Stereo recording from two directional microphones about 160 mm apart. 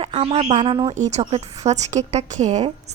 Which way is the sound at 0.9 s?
45° right (ahead or behind).